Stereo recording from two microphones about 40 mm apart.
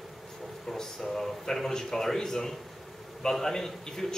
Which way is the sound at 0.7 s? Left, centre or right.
Centre.